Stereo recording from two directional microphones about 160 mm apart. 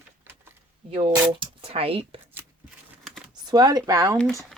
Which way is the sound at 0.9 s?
30° right (ahead or behind).